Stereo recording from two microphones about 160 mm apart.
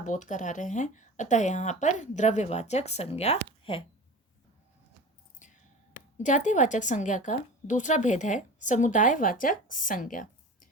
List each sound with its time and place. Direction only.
0.0 s speech: 50° left (ahead or behind); by 3.8 s 35° left (ahead or behind)
5.4 s a sound: 50° left (ahead or behind)
6.1 s speech: 50° left (ahead or behind)